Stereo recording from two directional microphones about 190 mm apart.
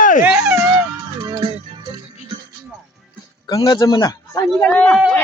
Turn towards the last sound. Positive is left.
turn(degrees=5)  # may be behind; listen again after turning